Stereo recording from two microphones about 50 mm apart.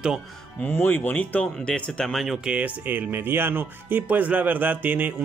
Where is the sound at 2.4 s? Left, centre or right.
Right.